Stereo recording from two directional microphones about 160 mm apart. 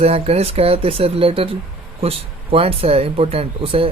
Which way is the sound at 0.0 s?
40° right (ahead or behind).